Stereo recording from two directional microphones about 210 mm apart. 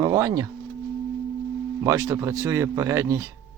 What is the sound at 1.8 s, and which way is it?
Speech, 15° right (ahead or behind).